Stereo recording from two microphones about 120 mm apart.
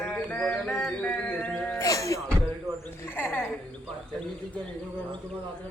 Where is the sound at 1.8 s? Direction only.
30° left (ahead or behind).